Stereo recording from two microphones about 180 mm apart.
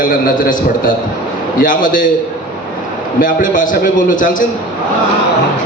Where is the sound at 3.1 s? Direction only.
50° left (ahead or behind).